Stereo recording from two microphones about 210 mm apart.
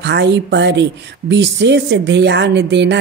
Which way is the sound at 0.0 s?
55° right (ahead or behind).